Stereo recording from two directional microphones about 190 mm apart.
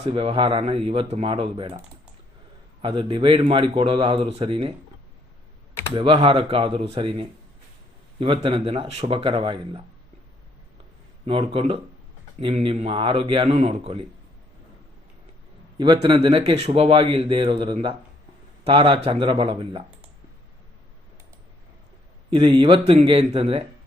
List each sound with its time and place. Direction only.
0.0 s a man's voice: 30° right (ahead or behind)
2.8 s a man's voice: 25° right (ahead or behind)
5.9 s a man's voice: 25° right (ahead or behind)
11.3 s a man's voice: 30° right (ahead or behind)
15.8 s a man's voice: 25° right (ahead or behind)
22.3 s a man's voice: 25° right (ahead or behind)